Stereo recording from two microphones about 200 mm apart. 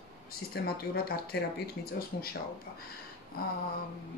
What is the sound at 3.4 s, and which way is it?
Speech, 50° left (ahead or behind).